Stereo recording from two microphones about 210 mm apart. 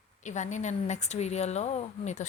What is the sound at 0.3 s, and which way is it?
Speech, 35° left (ahead or behind).